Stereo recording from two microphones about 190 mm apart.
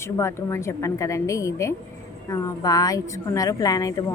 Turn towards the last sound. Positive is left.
turn(degrees=20)  # may be behind; listen again after turning